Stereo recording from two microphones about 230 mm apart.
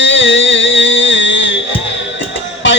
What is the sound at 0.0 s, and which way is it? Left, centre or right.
Music, left.